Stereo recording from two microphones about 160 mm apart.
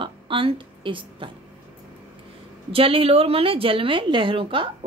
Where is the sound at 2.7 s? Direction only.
35° right (ahead or behind).